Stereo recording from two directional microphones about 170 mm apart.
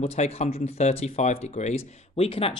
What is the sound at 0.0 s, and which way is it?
Speech, 35° left (ahead or behind).